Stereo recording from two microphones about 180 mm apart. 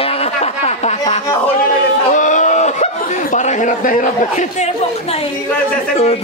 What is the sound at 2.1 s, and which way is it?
Chuckle, 45° left (ahead or behind).